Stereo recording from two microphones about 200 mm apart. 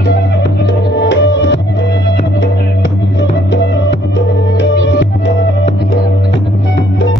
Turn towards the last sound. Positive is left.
turn(degrees=65)  # may be behind; listen again after turning